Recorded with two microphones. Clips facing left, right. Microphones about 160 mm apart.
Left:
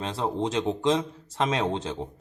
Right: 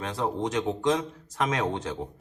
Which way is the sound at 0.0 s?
25° left (ahead or behind).